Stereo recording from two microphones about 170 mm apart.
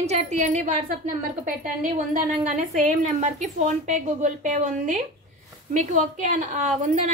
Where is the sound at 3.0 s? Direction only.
45° right (ahead or behind).